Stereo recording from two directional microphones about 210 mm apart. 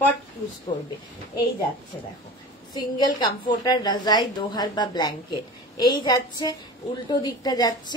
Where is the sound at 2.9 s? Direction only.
20° left (ahead or behind).